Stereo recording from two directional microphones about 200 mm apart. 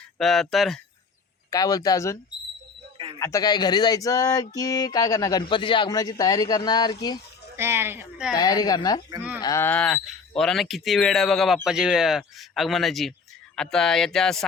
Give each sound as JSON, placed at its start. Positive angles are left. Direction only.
{"t": 0.2, "sound": "speech", "side_deg": 0}
{"t": 1.5, "sound": "speech", "side_deg": 20}
{"t": 3.2, "sound": "speech", "side_deg": 15}
{"t": 7.5, "sound": "speech", "side_deg": -10}
{"t": 8.4, "sound": "speech", "side_deg": 20}